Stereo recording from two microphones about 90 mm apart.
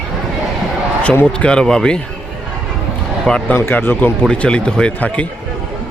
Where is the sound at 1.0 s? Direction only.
15° left (ahead or behind).